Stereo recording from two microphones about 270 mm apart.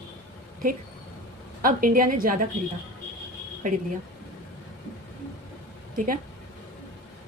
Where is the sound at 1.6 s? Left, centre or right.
Right.